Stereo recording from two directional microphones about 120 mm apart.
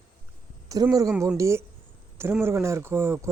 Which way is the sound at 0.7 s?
30° right (ahead or behind).